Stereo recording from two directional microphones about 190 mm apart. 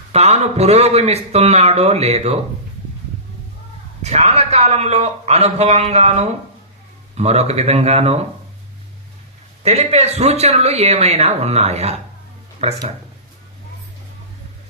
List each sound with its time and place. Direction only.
0.1 s speech: 35° right (ahead or behind)
4.0 s speech: 35° right (ahead or behind)
9.6 s speech: 35° right (ahead or behind)